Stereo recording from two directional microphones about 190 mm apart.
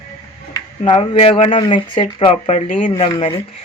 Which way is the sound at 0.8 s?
30° left (ahead or behind).